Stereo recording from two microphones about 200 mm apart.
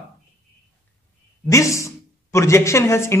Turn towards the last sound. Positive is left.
turn(degrees=15)  # may be behind; listen again after turning